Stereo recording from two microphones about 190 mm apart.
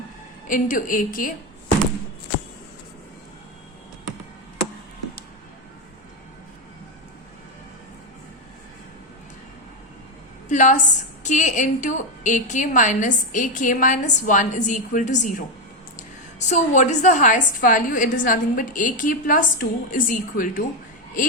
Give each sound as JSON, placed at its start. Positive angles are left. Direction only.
{"t": 0.4, "sound": "a woman's voice", "side_deg": 45}
{"t": 10.5, "sound": "a woman's voice", "side_deg": 40}